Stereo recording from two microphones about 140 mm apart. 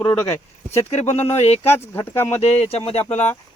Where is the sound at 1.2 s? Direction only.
50° left (ahead or behind).